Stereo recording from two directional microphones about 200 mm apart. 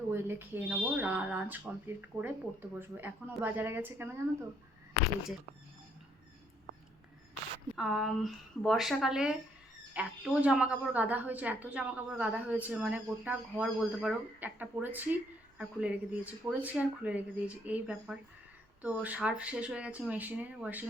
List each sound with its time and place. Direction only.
0.1 s a woman's voice: 10° right (ahead or behind)
7.8 s a woman's voice: centre (ahead or behind)